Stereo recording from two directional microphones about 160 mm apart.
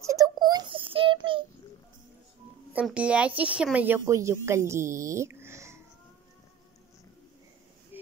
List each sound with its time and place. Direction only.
0.0 s child singing: 20° right (ahead or behind)
2.7 s speech: 10° right (ahead or behind)
7.9 s a sound: 10° right (ahead or behind)